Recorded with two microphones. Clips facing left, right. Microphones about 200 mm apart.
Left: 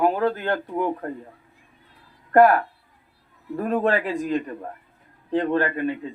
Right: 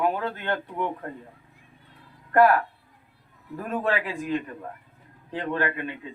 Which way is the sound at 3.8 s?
40° left (ahead or behind).